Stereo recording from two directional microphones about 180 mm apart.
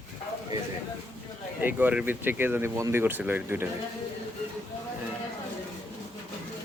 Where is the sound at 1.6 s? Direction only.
10° right (ahead or behind).